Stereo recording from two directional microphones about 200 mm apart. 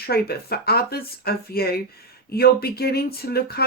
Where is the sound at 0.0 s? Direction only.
50° left (ahead or behind).